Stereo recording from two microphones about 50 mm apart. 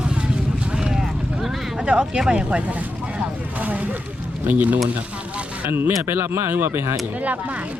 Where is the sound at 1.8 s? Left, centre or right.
Right.